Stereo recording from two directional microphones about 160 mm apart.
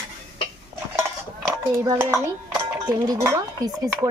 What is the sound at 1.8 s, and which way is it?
Speech, 20° right (ahead or behind).